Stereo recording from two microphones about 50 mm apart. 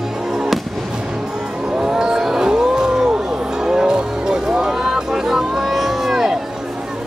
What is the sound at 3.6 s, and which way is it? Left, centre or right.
Music, centre.